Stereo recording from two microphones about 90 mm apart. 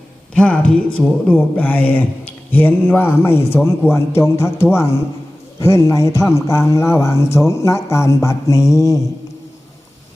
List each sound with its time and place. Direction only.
0.3 s a man's voice: 15° left (ahead or behind); by 9.0 s 35° left (ahead or behind)